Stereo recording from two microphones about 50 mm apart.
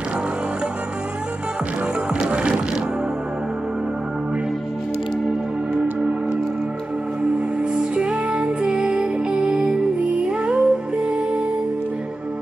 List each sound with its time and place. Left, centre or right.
2.1 s music: centre
5.8 s music: centre
7.7 s music: centre